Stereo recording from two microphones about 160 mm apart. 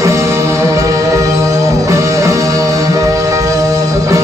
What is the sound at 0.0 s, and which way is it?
Music, 20° right (ahead or behind).